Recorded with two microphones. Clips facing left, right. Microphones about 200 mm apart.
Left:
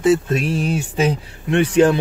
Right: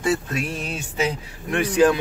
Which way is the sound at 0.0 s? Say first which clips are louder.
Left 7 dB; 25° left (ahead or behind).